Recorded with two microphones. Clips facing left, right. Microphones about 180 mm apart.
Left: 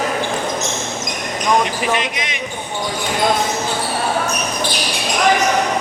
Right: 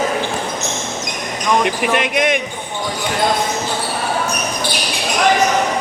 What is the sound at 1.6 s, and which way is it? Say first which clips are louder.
Speech: right 2 dB; 55° right (ahead or behind).